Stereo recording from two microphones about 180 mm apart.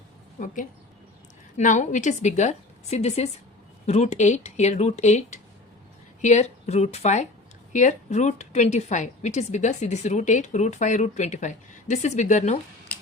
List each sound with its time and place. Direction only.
0.3 s a woman's voice: 45° left (ahead or behind)